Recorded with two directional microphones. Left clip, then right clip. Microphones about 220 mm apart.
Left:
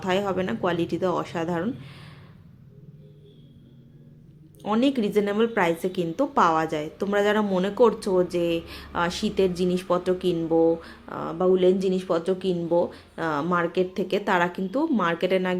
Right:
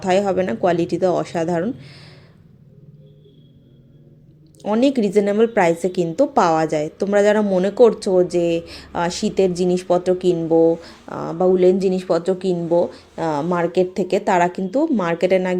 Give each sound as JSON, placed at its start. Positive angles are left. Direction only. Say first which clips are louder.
{"t": 0.0, "sound": "a woman's voice", "louder": "right 7 dB", "side_deg": -20}
{"t": 4.6, "sound": "a woman's voice", "louder": "right 6 dB", "side_deg": -15}